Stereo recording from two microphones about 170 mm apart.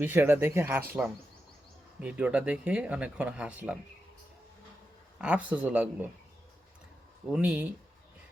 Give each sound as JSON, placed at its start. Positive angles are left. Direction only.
{"t": 0.0, "sound": "speech", "side_deg": -10}
{"t": 2.0, "sound": "speech", "side_deg": -5}
{"t": 5.2, "sound": "speech", "side_deg": -10}
{"t": 7.3, "sound": "speech", "side_deg": -5}